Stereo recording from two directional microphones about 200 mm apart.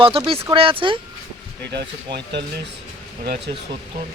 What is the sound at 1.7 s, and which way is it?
Speech, 60° right (ahead or behind).